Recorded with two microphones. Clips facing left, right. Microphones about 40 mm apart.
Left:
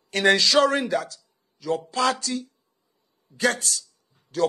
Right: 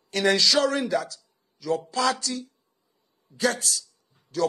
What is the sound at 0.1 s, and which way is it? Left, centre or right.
A man's voice, left.